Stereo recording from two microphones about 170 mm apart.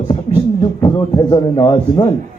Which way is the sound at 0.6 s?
25° left (ahead or behind).